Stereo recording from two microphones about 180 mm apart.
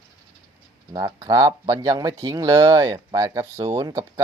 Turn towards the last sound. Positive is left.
turn(degrees=-15)  # may be behind; listen again after turning